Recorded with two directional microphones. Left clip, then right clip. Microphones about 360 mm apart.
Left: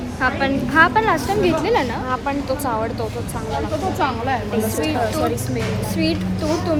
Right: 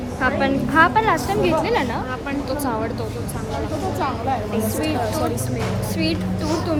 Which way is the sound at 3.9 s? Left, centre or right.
Left.